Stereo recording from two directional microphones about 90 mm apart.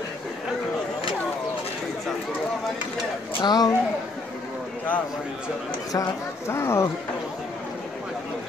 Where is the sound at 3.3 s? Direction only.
50° left (ahead or behind).